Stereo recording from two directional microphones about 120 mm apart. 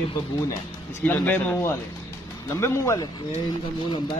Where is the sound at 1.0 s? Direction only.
15° left (ahead or behind).